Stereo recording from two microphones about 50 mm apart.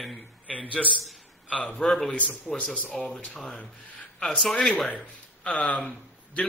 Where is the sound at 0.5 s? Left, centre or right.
Left.